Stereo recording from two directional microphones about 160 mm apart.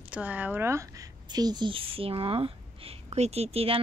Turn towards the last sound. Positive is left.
turn(degrees=-35)  # may be behind; listen again after turning